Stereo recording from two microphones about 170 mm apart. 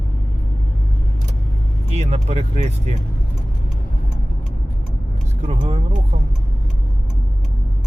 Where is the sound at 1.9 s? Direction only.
40° right (ahead or behind).